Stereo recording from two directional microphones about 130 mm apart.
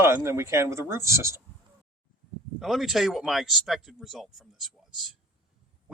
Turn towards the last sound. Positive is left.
turn(degrees=0)  # may be behind; listen again after turning